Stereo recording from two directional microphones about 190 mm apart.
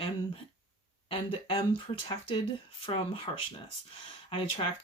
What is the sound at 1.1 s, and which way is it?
Speech, 30° left (ahead or behind).